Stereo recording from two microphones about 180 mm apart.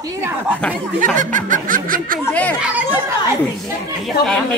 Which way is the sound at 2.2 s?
10° left (ahead or behind).